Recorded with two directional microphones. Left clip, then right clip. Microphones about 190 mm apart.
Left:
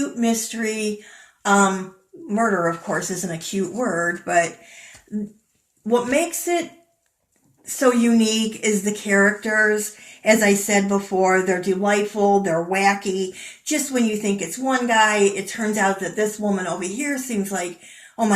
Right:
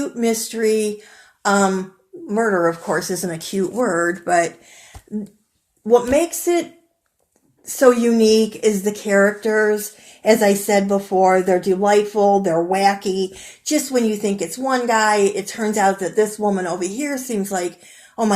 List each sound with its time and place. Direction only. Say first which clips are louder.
0.2 s speech: right 7 dB; 45° right (ahead or behind)
2.3 s speech: right 3 dB; 40° right (ahead or behind)
5.9 s speech: right 5 dB; 45° right (ahead or behind)
7.8 s speech: right 5 dB; 45° right (ahead or behind)